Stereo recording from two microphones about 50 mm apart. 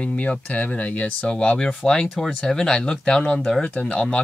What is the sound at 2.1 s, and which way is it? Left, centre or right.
Speech, centre.